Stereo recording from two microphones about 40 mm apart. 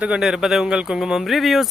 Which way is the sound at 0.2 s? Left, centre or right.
Centre.